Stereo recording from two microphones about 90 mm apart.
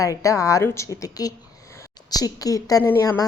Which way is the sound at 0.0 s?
40° left (ahead or behind).